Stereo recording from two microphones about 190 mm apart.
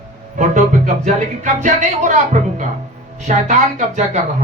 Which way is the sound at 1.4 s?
40° right (ahead or behind).